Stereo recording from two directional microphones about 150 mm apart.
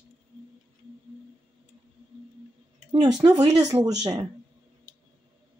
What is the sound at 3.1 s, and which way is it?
Speech, 25° right (ahead or behind).